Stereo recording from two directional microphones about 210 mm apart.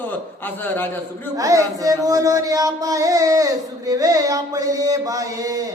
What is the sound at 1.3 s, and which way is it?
Music, 15° right (ahead or behind).